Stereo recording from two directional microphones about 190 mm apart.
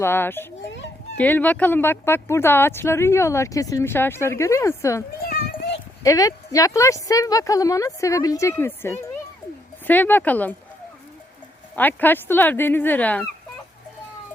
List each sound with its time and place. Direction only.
0.0 s speech: 10° left (ahead or behind)
0.6 s a sound: 70° left (ahead or behind)
1.1 s speech: 10° left (ahead or behind)
5.2 s children playing: 60° left (ahead or behind)
6.0 s speech: 20° left (ahead or behind)
11.8 s speech: 10° left (ahead or behind)